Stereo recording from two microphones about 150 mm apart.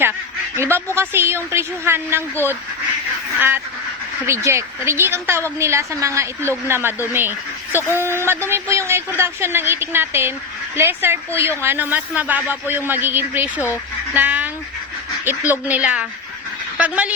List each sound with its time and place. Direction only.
0.5 s speech: 15° right (ahead or behind)
4.3 s speech: 15° right (ahead or behind)
7.7 s speech: 15° left (ahead or behind)
7.9 s a woman's voice: 15° right (ahead or behind)